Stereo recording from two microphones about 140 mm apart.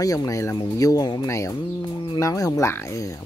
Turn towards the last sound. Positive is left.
turn(degrees=25)  # may be behind; listen again after turning